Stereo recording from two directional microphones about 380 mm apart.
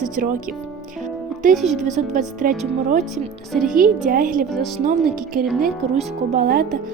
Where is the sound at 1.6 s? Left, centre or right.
Centre.